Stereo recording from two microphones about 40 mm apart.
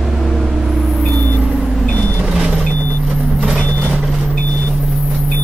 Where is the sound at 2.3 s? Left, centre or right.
Centre.